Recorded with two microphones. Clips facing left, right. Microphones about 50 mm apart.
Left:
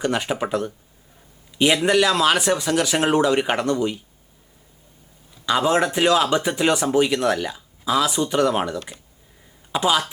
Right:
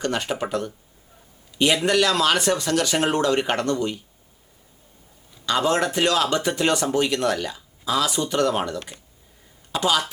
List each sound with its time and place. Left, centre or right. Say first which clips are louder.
0.0 s speech: left 2 dB; centre
5.5 s speech: left 2 dB; centre